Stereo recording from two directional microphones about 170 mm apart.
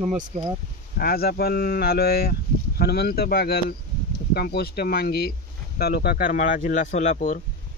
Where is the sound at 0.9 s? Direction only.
65° left (ahead or behind); by 7.3 s 45° left (ahead or behind).